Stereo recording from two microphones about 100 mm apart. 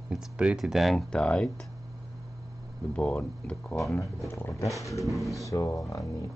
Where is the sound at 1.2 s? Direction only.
10° left (ahead or behind).